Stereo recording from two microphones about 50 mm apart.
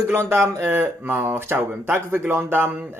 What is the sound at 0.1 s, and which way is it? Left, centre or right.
Speech, right.